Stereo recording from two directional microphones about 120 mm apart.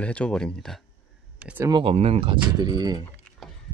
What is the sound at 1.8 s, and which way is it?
Speech, 60° right (ahead or behind).